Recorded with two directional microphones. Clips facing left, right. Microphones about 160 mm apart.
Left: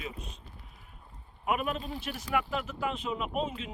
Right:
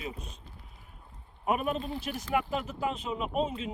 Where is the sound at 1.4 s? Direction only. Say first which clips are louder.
Right 2 dB; 30° right (ahead or behind).